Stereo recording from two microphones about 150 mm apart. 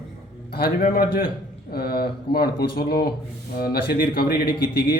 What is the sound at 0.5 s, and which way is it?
Speech, 85° left.